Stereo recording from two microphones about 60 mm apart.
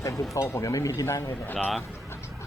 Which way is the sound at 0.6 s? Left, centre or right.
Left.